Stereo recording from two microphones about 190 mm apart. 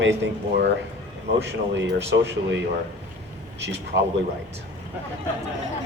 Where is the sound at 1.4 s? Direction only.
65° right (ahead or behind).